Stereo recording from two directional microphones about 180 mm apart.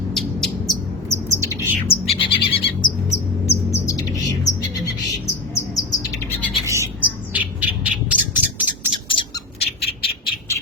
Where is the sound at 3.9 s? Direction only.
20° left (ahead or behind).